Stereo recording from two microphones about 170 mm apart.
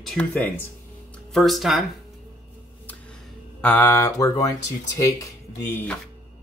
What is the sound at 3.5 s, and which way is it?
Speech, 10° left (ahead or behind).